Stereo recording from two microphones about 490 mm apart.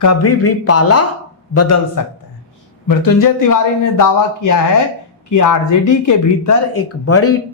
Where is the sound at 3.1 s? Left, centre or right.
Left.